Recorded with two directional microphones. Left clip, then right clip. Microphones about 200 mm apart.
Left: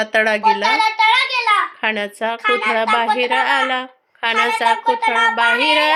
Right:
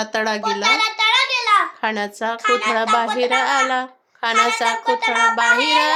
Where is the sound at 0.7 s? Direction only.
40° right (ahead or behind).